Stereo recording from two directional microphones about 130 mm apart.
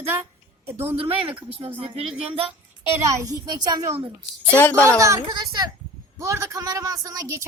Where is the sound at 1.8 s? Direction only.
45° right (ahead or behind).